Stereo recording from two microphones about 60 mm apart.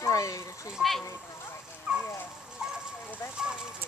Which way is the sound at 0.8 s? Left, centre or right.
Centre.